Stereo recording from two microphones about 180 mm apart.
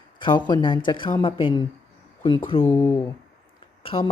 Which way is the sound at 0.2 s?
25° left (ahead or behind).